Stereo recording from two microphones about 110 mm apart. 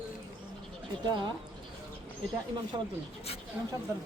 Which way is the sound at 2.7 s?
35° right (ahead or behind).